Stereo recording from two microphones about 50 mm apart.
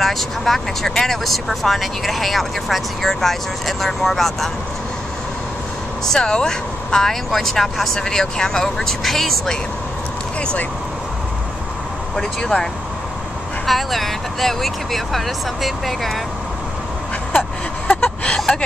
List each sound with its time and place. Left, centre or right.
0.0 s speech: centre
6.0 s speech: centre
12.2 s speech: centre
13.7 s speech: centre
17.8 s a sound: centre